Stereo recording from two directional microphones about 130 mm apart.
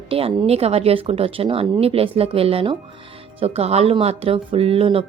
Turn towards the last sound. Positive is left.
turn(degrees=-45)  # may be behind; listen again after turning